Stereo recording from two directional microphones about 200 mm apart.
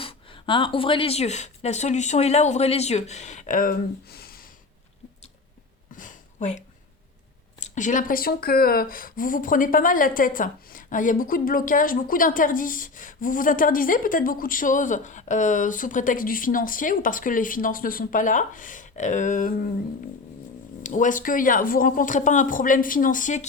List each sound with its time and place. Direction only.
0.0 s speech: 25° left (ahead or behind); by 4.4 s 50° left (ahead or behind)
5.9 s a sound: 40° left (ahead or behind)
7.6 s speech: 40° left (ahead or behind)
20.8 s speech: 40° left (ahead or behind)